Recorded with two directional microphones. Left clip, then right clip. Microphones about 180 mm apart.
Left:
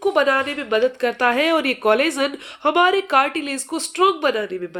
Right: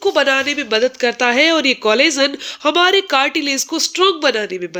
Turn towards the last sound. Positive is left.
turn(degrees=-25)  # may be behind; listen again after turning